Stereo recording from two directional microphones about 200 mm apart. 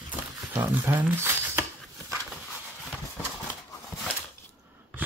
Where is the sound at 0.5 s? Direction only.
10° right (ahead or behind).